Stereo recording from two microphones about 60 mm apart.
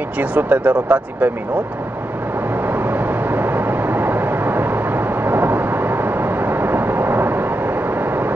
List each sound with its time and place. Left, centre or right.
0.2 s speech: right
2.9 s vehicle: right